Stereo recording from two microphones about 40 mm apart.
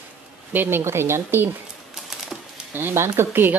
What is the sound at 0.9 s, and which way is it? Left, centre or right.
Speech, right.